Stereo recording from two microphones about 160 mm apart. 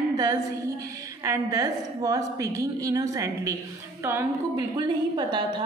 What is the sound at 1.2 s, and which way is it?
A woman's voice, 20° right (ahead or behind).